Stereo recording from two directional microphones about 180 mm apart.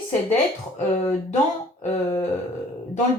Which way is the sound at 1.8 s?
35° left (ahead or behind).